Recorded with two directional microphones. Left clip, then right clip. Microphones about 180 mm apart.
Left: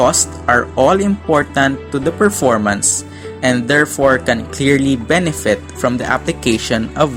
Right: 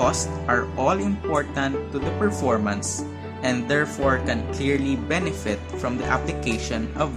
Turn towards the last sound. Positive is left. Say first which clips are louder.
# left 11 dB
turn(degrees=35)  # may be behind; listen again after turning